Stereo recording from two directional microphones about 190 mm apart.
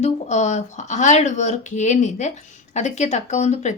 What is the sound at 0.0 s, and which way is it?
A woman's voice, 35° left (ahead or behind).